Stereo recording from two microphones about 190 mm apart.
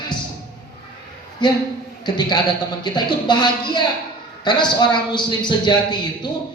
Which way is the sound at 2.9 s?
25° left (ahead or behind).